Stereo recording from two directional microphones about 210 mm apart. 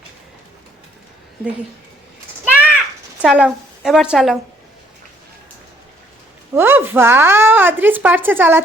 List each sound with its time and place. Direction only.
2.4 s a sound: 5° right (ahead or behind)
3.2 s a woman's voice: 5° right (ahead or behind)
6.5 s speech: 10° right (ahead or behind)